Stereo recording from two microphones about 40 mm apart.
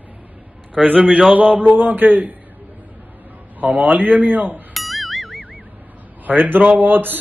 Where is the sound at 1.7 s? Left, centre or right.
Right.